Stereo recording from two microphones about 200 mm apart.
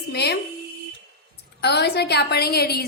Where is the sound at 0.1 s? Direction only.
55° left (ahead or behind).